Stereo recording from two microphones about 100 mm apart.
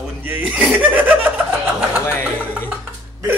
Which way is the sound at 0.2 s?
15° right (ahead or behind).